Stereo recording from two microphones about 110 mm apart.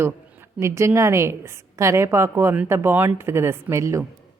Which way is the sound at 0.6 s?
25° right (ahead or behind).